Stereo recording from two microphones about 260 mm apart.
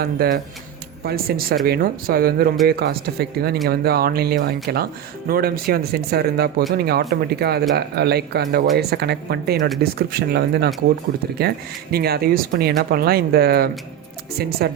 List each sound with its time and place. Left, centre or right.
0.0 s speech: right